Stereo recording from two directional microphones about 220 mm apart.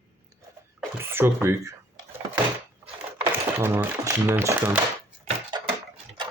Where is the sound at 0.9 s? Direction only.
10° right (ahead or behind).